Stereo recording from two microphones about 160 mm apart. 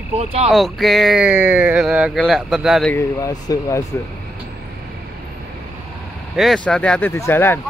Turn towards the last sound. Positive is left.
turn(degrees=15)  # may be behind; listen again after turning